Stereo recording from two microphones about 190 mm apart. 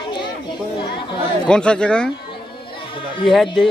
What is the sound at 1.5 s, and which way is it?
Speech, 5° left (ahead or behind).